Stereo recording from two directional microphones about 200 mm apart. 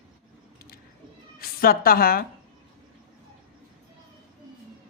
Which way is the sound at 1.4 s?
45° left (ahead or behind).